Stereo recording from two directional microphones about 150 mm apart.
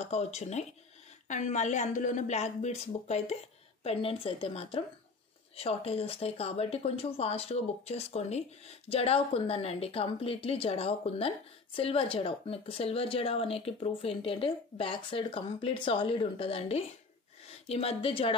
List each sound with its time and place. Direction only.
0.0 s a woman's voice: 45° left (ahead or behind)